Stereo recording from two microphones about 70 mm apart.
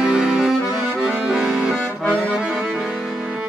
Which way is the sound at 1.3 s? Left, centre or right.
Centre.